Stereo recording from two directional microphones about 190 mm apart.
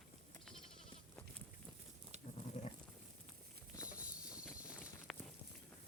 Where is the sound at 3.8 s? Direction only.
5° right (ahead or behind).